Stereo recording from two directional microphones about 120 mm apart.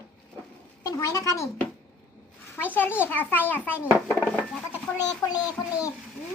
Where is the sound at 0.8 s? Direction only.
30° left (ahead or behind).